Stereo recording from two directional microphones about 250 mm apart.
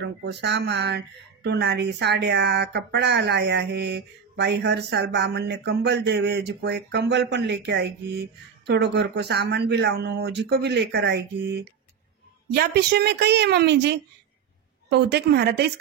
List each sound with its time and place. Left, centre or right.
0.0 s a woman's voice: right